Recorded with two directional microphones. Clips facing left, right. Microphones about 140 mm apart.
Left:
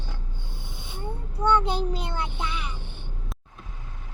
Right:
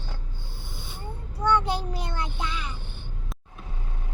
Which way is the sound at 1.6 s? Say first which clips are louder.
Left 2 dB; 20° left (ahead or behind).